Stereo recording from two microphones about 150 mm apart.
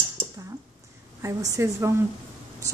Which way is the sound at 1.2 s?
20° right (ahead or behind).